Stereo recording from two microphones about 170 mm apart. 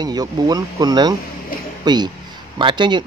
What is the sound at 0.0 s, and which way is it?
Speech, 25° right (ahead or behind).